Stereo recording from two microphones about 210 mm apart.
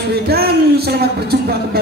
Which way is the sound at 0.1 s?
50° right (ahead or behind).